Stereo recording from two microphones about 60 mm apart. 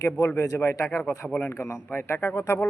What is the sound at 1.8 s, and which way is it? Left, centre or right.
Speech, left.